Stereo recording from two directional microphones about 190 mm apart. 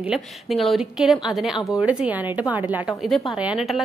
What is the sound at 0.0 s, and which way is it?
A woman's voice, centre (ahead or behind).